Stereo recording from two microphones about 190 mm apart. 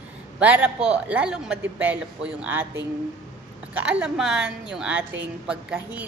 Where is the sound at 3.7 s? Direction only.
5° right (ahead or behind).